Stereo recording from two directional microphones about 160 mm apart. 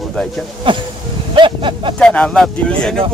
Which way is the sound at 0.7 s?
30° right (ahead or behind).